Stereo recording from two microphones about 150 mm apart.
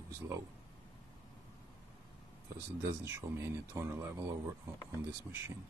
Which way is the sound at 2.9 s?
20° right (ahead or behind).